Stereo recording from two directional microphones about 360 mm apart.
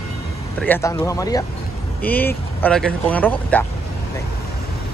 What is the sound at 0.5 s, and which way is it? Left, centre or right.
Speech, centre.